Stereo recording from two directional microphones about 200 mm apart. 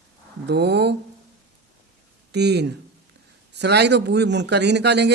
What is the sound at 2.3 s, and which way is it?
Speech, 55° right (ahead or behind).